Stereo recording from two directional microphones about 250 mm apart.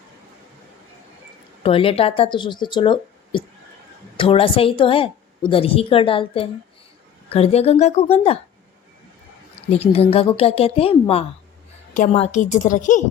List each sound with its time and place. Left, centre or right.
1.6 s a woman's voice: left
9.6 s a woman's voice: left